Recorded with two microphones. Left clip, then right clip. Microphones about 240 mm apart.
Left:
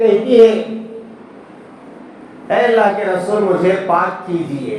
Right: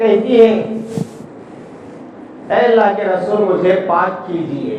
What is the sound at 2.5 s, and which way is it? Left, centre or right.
A man's voice, left.